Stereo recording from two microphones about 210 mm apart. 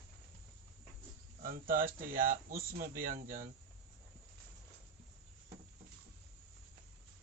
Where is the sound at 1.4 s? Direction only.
40° right (ahead or behind).